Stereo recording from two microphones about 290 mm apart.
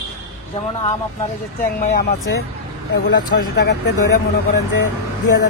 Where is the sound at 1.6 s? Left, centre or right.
Left.